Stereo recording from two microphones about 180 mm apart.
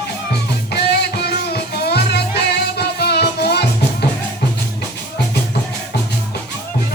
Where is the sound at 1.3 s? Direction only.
65° left (ahead or behind).